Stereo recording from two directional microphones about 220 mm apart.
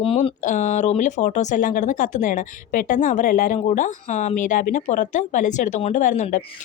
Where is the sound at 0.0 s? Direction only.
25° left (ahead or behind).